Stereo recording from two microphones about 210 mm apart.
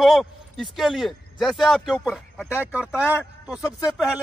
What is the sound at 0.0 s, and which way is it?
A man's voice, centre (ahead or behind).